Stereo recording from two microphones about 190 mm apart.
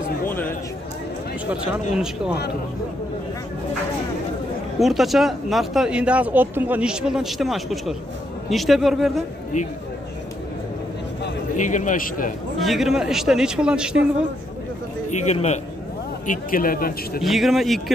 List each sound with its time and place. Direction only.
4.7 s speech: centre (ahead or behind)
11.5 s a man's voice: 40° left (ahead or behind)
12.5 s speech: centre (ahead or behind)
15.0 s a man's voice: 40° left (ahead or behind)
16.3 s speech: 45° left (ahead or behind)
17.2 s speech: centre (ahead or behind)